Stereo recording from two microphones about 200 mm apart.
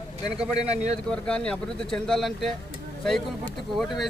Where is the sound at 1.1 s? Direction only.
5° left (ahead or behind).